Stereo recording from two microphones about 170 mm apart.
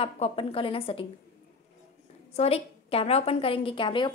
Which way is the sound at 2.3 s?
35° left (ahead or behind).